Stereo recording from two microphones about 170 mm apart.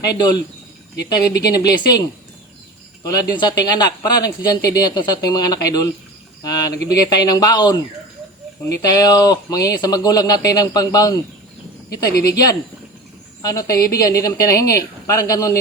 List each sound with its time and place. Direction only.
0.0 s speech: 25° left (ahead or behind)
1.5 s speech: 20° left (ahead or behind)
6.4 s a sound: 20° left (ahead or behind)
6.8 s speech: 20° left (ahead or behind)